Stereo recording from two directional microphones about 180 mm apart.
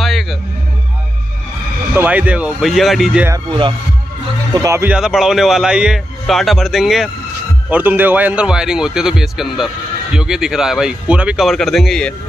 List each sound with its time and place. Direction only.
0.0 s a sound: centre (ahead or behind)
2.0 s speech: 10° right (ahead or behind)
4.6 s speech: 15° right (ahead or behind)
4.9 s a man's voice: 5° right (ahead or behind)